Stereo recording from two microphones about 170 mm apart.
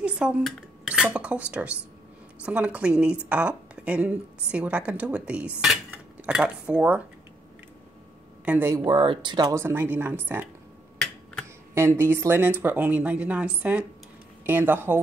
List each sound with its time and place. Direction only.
0.0 s a woman's voice: 5° right (ahead or behind)
8.5 s a woman's voice: 15° right (ahead or behind)
11.7 s a woman's voice: 15° right (ahead or behind)